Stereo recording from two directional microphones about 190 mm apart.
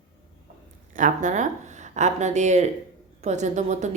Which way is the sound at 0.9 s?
45° right (ahead or behind).